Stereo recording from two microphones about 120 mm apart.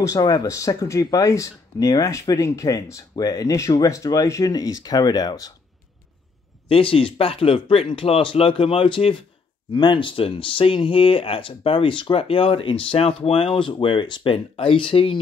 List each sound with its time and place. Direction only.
0.0 s speech: 30° left (ahead or behind)
6.7 s speech: 50° left (ahead or behind)